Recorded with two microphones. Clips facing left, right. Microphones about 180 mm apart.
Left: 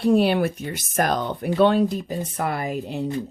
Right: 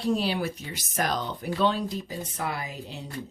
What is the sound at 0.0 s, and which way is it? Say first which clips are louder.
Speech: left 8 dB; 60° left (ahead or behind).